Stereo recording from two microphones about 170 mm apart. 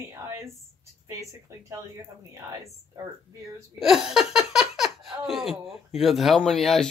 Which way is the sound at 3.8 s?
Centre (ahead or behind).